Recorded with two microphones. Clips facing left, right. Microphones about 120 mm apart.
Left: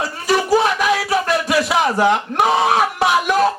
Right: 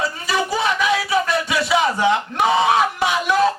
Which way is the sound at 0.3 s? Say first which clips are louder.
Left 6 dB; 45° left (ahead or behind).